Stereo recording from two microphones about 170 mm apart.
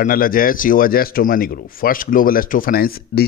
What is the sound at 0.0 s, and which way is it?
Speech, 55° left (ahead or behind).